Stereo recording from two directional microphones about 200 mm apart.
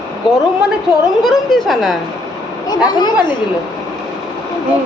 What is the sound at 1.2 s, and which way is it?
Speech, centre (ahead or behind).